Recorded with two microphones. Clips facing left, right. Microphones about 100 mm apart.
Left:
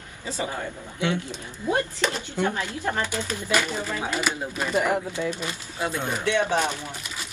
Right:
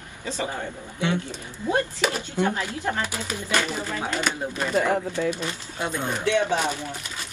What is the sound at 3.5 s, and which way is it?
Speech, 10° left (ahead or behind).